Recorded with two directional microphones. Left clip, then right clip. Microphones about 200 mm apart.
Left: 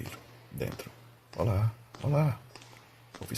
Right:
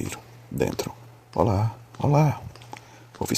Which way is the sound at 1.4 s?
30° right (ahead or behind).